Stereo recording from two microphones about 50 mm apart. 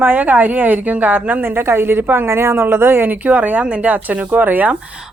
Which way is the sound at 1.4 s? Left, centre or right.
Right.